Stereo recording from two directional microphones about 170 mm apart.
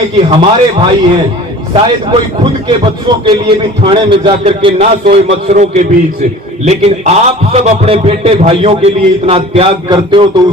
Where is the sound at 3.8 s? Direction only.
30° right (ahead or behind).